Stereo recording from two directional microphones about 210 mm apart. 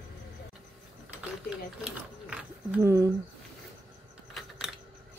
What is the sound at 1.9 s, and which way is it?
Speech, 5° right (ahead or behind).